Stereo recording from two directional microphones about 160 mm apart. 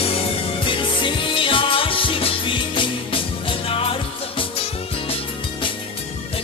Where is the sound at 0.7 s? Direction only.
35° left (ahead or behind).